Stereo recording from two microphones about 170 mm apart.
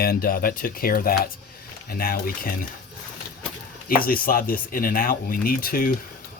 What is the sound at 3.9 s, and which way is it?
Speech, 60° left (ahead or behind).